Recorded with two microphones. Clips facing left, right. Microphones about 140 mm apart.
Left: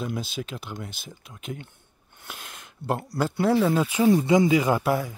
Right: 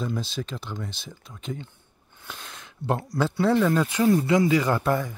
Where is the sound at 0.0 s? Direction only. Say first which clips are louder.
Right 1 dB; 5° left (ahead or behind).